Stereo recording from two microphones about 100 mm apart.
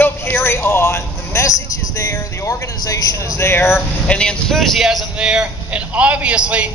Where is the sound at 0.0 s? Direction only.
20° left (ahead or behind).